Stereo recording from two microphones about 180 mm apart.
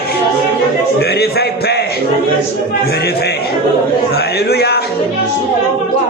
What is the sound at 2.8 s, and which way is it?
Music, 60° left (ahead or behind).